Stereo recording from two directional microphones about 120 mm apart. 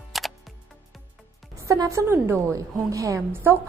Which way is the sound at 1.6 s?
25° right (ahead or behind).